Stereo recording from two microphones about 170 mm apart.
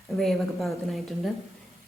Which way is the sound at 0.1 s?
Centre (ahead or behind).